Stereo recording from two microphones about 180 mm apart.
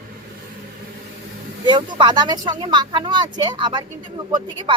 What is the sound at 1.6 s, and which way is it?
Speech, 25° right (ahead or behind).